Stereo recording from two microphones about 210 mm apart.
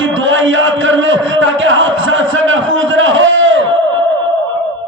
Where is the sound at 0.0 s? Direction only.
65° right (ahead or behind).